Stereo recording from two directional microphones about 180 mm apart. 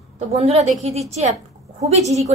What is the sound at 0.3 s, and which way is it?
A woman's voice, 35° right (ahead or behind).